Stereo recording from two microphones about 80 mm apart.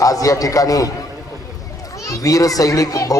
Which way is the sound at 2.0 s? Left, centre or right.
Left.